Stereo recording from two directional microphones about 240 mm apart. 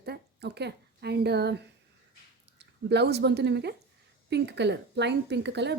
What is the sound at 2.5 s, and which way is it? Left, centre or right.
Speech, right.